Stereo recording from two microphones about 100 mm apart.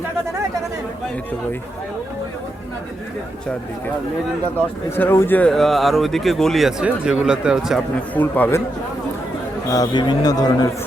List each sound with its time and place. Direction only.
4.9 s speech: 20° left (ahead or behind)
5.5 s speech: 5° left (ahead or behind)
8.1 s a man's voice: 15° left (ahead or behind)
9.6 s a man's voice: 40° left (ahead or behind)